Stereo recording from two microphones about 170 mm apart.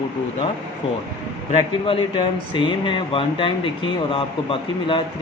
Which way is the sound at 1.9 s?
30° left (ahead or behind).